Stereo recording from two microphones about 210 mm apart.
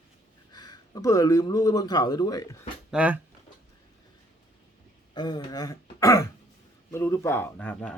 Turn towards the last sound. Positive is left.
turn(degrees=5)  # may be behind; listen again after turning